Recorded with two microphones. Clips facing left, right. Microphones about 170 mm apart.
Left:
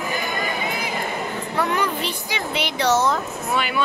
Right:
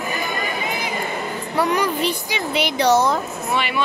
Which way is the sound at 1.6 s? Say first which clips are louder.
Right 4 dB; 15° right (ahead or behind).